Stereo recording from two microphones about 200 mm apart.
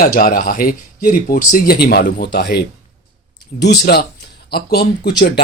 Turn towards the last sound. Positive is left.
turn(degrees=50)  # may be behind; listen again after turning